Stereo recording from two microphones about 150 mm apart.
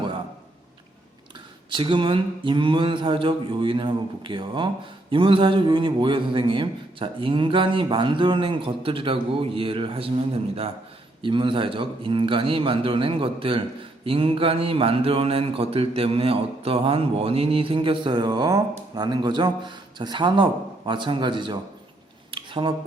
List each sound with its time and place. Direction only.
1.7 s speech: 35° right (ahead or behind)
11.2 s speech: 35° right (ahead or behind)
22.3 s a sound: 35° right (ahead or behind)